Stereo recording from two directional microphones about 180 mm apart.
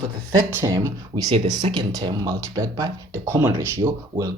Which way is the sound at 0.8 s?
20° right (ahead or behind).